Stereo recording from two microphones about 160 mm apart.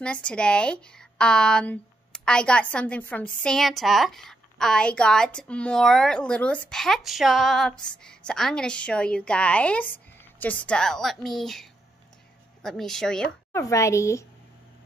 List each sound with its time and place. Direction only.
0.0 s a woman's voice: 5° left (ahead or behind)
13.5 s a woman's voice: 20° left (ahead or behind)